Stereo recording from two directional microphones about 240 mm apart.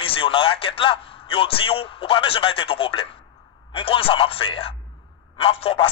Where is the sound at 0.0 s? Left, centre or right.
Left.